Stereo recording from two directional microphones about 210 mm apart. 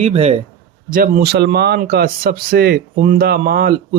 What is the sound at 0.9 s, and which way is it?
Speech, 45° right (ahead or behind).